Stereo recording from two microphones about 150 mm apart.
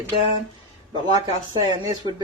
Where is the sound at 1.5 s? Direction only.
25° right (ahead or behind).